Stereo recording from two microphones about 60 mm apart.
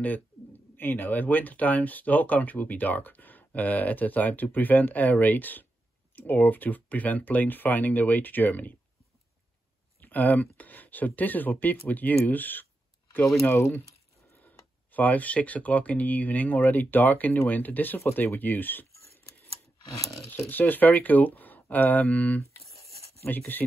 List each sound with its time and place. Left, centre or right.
0.0 s speech: left
10.0 s speech: left
14.9 s speech: left
20.2 s speech: left